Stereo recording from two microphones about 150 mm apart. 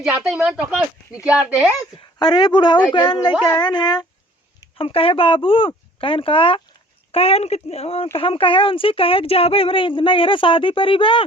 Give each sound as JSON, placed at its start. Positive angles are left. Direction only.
{"t": 0.0, "sound": "speech", "side_deg": -5}
{"t": 2.1, "sound": "speech", "side_deg": 30}